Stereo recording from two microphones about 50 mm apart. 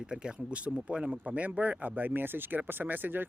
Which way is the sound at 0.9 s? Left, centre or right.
Centre.